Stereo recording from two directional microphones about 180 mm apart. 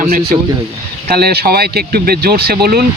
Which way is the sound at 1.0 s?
60° right (ahead or behind).